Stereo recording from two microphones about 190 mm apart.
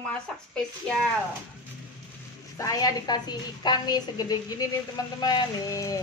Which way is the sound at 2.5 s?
20° left (ahead or behind).